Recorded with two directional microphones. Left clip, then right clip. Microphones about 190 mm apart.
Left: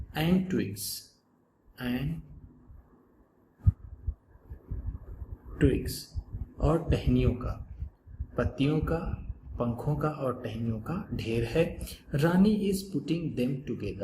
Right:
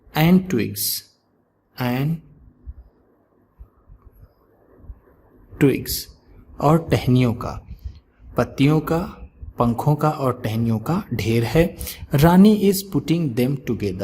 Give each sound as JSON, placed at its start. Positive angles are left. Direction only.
{"t": 0.1, "sound": "a man's voice", "side_deg": -55}
{"t": 5.5, "sound": "speech", "side_deg": -55}